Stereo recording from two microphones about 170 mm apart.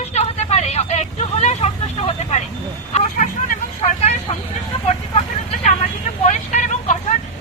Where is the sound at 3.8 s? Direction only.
40° left (ahead or behind).